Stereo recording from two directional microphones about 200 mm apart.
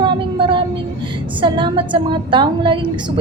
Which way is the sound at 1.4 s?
25° right (ahead or behind).